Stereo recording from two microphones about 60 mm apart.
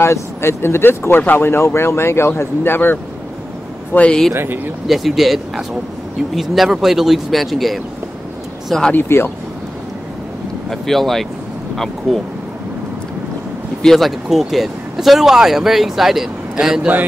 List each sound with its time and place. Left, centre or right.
0.0 s speech: left
1.5 s speech: left
4.3 s speech: right
4.8 s speech: centre
8.9 s speech: left
10.7 s speech: centre
13.8 s speech: centre